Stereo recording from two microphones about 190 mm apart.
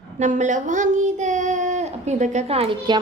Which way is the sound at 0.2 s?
40° right (ahead or behind).